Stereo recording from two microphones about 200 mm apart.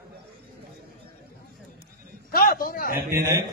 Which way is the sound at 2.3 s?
45° left (ahead or behind).